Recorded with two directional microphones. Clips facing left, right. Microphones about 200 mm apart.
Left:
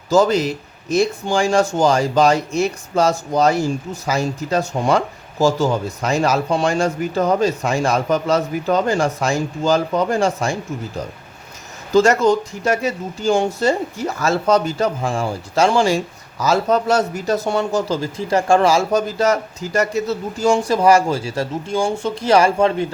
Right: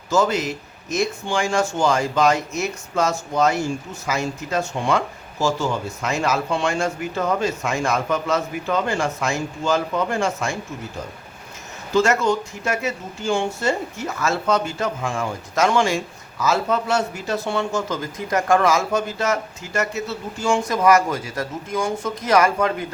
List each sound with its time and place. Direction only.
0.1 s speech: 35° left (ahead or behind)
11.9 s speech: 35° left (ahead or behind)